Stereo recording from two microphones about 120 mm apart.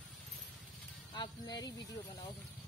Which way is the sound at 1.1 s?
35° left (ahead or behind).